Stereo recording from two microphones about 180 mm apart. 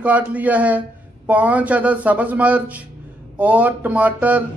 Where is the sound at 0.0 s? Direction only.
10° right (ahead or behind).